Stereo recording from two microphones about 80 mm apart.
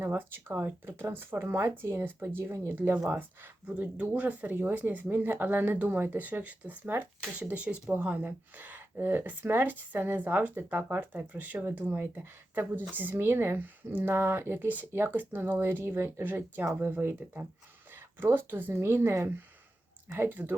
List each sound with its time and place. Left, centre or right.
0.1 s speech: right
2.7 s speech: right